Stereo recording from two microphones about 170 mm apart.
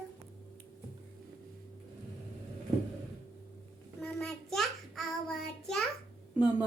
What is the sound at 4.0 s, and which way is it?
Child singing, 5° left (ahead or behind).